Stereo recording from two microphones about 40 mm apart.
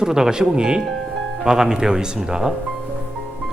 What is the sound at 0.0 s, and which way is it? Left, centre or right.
Speech, centre.